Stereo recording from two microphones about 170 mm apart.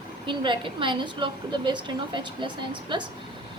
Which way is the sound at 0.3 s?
30° right (ahead or behind).